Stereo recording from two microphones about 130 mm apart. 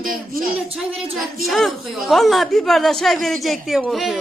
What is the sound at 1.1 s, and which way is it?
A woman's voice, centre (ahead or behind).